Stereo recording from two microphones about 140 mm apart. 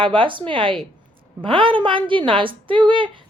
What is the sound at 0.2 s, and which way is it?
A woman's voice, 35° right (ahead or behind).